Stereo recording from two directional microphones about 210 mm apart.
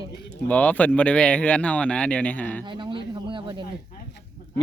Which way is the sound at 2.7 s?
20° right (ahead or behind).